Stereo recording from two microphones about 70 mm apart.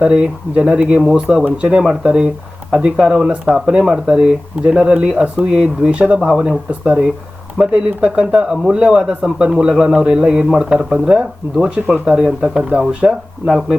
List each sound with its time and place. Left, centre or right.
0.0 s a man's voice: centre
6.3 s speech: centre
6.7 s a man's voice: right